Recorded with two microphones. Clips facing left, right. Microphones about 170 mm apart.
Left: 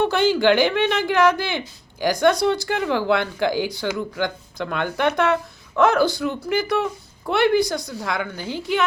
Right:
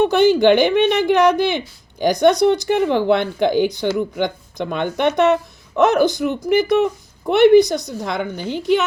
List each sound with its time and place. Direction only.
0.0 s speech: 20° right (ahead or behind)